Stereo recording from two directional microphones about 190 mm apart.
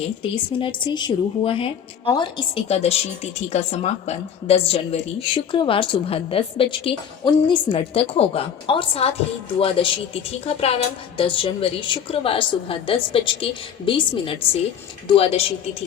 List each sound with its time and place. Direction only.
0.0 s a woman's voice: 30° left (ahead or behind)